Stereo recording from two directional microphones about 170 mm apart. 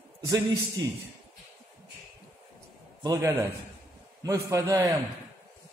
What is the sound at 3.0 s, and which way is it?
Speech, 20° right (ahead or behind).